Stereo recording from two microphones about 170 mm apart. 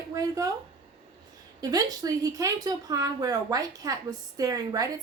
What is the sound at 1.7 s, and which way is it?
A woman's voice, 20° right (ahead or behind).